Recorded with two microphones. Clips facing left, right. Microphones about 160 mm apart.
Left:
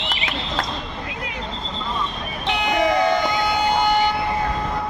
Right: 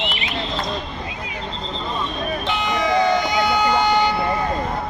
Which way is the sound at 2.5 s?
65° left (ahead or behind).